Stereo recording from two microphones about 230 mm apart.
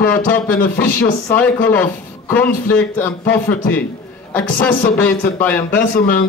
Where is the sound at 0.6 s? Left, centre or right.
Left.